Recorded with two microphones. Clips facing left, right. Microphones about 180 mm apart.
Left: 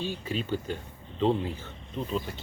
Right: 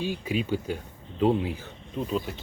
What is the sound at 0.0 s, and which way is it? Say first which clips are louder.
Speech: right 4 dB; 10° right (ahead or behind).